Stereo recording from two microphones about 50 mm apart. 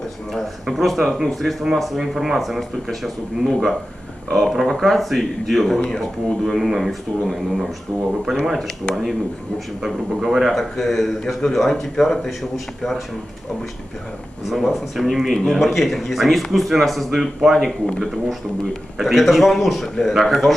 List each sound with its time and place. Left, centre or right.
0.3 s speech: centre
8.9 s speech: left
9.8 s speech: centre
14.4 s speech: centre